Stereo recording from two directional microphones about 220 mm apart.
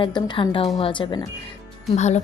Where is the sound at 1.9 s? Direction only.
30° left (ahead or behind).